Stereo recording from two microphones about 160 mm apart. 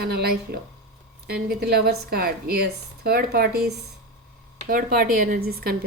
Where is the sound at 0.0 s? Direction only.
80° right.